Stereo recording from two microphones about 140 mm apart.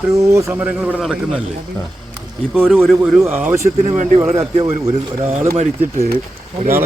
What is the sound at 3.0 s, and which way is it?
Speech, 10° right (ahead or behind).